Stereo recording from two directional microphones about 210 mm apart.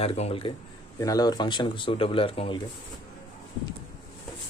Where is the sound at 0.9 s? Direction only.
15° left (ahead or behind).